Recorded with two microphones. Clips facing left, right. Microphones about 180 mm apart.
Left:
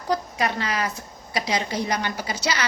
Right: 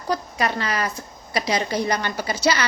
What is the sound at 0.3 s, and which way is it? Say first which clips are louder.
A woman's voice: right 1 dB; 15° left (ahead or behind).